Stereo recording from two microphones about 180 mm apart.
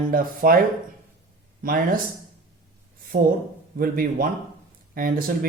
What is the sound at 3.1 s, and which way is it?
A man's voice, 55° right (ahead or behind).